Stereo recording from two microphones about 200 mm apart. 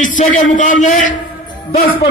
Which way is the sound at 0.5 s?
40° left (ahead or behind).